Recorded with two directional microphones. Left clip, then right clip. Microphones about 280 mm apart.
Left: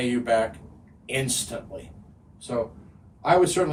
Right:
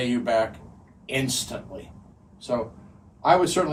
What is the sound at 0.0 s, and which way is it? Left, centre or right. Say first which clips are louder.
A man's voice: even; centre.